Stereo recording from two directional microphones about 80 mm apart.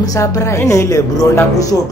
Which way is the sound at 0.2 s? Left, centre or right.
Left.